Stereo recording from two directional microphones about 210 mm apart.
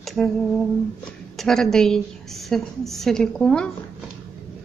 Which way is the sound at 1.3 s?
Centre (ahead or behind).